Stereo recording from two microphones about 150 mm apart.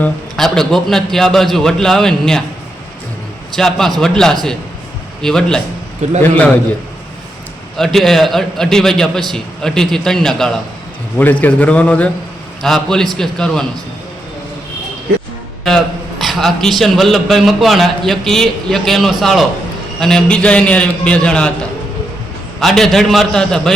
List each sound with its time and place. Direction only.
0.0 s a man's voice: 5° left (ahead or behind)
3.5 s a man's voice: 5° left (ahead or behind)
6.0 s a man's voice: 50° right (ahead or behind)
7.9 s a man's voice: centre (ahead or behind)
15.6 s a man's voice: centre (ahead or behind)
22.6 s a man's voice: centre (ahead or behind)